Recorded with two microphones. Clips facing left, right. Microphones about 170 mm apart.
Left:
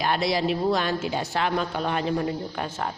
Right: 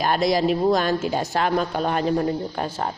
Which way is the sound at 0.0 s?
45° right (ahead or behind).